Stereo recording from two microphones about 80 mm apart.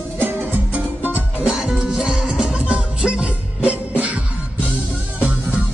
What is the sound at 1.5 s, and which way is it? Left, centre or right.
Music, centre.